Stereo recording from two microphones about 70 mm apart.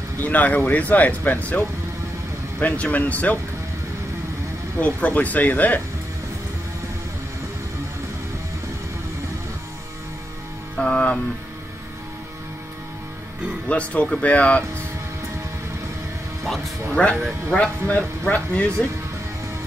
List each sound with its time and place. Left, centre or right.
0.2 s speech: left
2.6 s speech: left
4.7 s speech: left
10.8 s speech: centre
13.7 s speech: centre
16.9 s speech: centre